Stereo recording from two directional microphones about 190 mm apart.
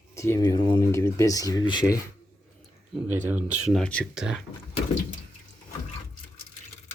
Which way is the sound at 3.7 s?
5° left (ahead or behind).